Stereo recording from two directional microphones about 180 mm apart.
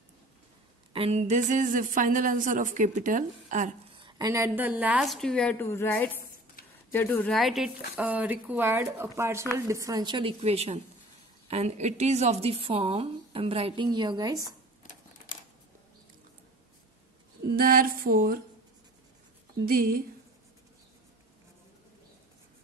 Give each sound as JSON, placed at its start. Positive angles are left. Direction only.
{"t": 0.9, "sound": "a woman's voice", "side_deg": -35}
{"t": 3.9, "sound": "a woman's voice", "side_deg": -25}
{"t": 17.6, "sound": "a woman's voice", "side_deg": -50}
{"t": 19.6, "sound": "a woman's voice", "side_deg": -55}